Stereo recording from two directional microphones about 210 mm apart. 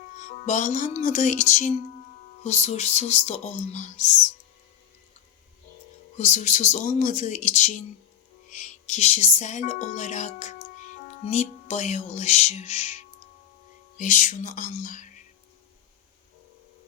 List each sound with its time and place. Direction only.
0.3 s music: 35° left (ahead or behind)
6.1 s music: 35° left (ahead or behind)
14.0 s music: 35° left (ahead or behind)